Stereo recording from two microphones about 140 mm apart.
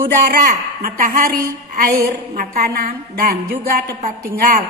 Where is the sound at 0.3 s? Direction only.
90° right.